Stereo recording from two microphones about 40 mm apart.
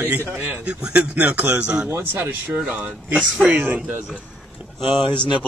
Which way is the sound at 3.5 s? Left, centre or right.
Right.